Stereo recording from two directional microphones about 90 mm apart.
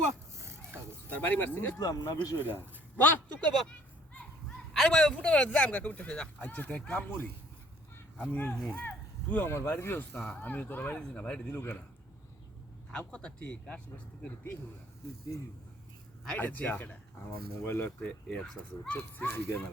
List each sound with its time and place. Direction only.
0.1 s a sound: 30° right (ahead or behind)
1.1 s a man's voice: 20° left (ahead or behind)
1.8 s speech: 45° left (ahead or behind)
3.0 s a sound: 20° left (ahead or behind)
4.7 s speech: 5° left (ahead or behind)
7.9 s a sound: 20° left (ahead or behind)
8.5 s speech: 5° left (ahead or behind)
8.8 s a man's voice: 20° left (ahead or behind)
12.9 s speech: 10° left (ahead or behind)
16.2 s a man's voice: 15° left (ahead or behind)
18.3 s speech: 10° left (ahead or behind)
18.9 s a man's voice: 25° left (ahead or behind)